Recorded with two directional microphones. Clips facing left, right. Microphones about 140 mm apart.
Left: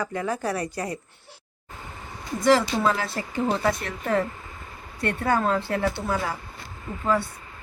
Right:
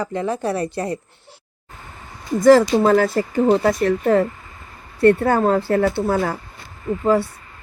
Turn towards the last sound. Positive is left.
turn(degrees=-40)  # may be behind; listen again after turning